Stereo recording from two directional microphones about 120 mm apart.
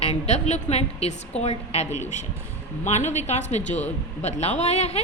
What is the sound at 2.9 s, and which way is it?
A man's voice, 70° left (ahead or behind).